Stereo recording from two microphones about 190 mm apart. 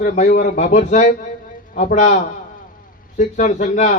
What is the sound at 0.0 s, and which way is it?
A man's voice, 45° left (ahead or behind).